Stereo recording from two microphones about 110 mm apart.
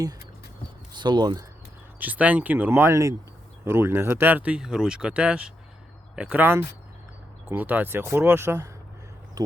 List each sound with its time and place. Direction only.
0.9 s speech: 40° right (ahead or behind)
2.0 s speech: 15° right (ahead or behind)